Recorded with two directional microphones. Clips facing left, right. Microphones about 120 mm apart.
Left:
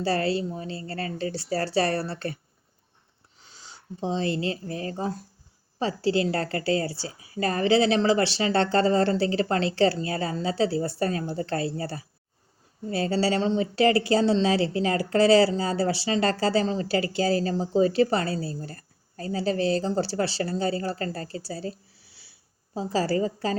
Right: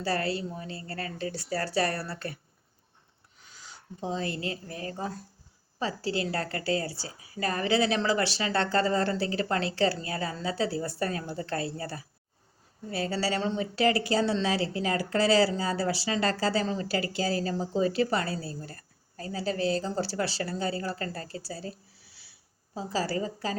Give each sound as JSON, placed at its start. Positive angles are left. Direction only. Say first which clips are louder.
{"t": 0.0, "sound": "a woman's voice", "louder": "left 5 dB", "side_deg": 30}
{"t": 3.4, "sound": "a woman's voice", "louder": "left 2 dB", "side_deg": 30}